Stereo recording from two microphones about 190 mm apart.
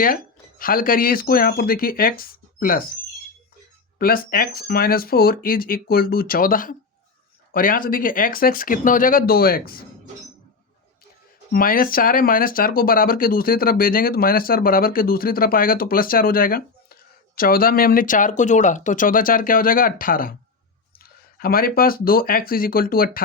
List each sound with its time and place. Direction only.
0.6 s speech: 50° left (ahead or behind)
3.9 s speech: 50° left (ahead or behind)
11.5 s speech: 50° left (ahead or behind)